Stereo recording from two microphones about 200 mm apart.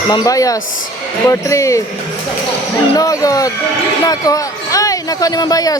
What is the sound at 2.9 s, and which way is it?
Speech, 15° left (ahead or behind).